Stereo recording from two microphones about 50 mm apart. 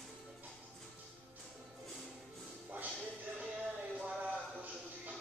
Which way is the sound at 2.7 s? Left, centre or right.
Right.